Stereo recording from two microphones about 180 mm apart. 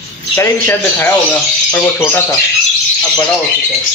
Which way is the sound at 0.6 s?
10° left (ahead or behind).